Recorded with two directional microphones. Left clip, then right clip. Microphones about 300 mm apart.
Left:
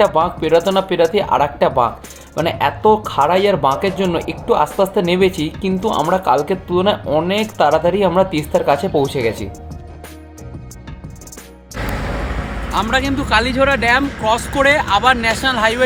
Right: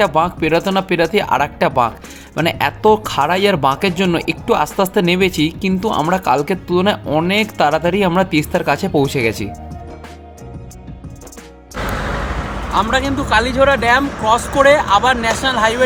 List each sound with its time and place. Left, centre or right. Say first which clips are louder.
0.0 s speech: even; right
11.8 s vehicle: right 3 dB; centre
12.7 s speech: right 1 dB; centre